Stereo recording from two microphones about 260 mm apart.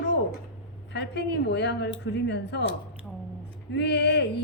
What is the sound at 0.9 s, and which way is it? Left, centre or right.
Speech, left.